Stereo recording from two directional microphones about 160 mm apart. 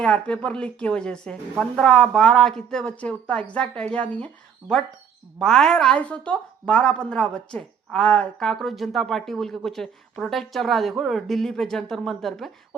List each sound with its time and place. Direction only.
0.0 s speech: 5° left (ahead or behind)
5.4 s speech: 5° left (ahead or behind)